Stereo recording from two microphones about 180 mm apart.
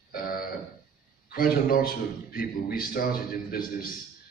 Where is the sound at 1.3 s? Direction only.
55° left (ahead or behind).